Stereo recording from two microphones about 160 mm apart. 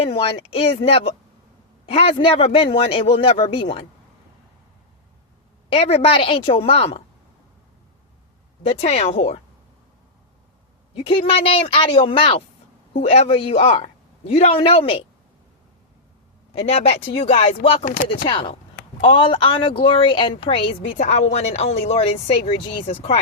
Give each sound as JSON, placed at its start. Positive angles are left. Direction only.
{"t": 0.0, "sound": "speech", "side_deg": 35}
{"t": 5.7, "sound": "speech", "side_deg": 35}
{"t": 8.6, "sound": "speech", "side_deg": 40}
{"t": 10.9, "sound": "speech", "side_deg": 35}
{"t": 16.6, "sound": "speech", "side_deg": 40}